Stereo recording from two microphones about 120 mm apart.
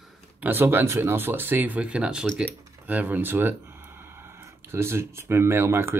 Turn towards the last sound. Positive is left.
turn(degrees=-20)  # may be behind; listen again after turning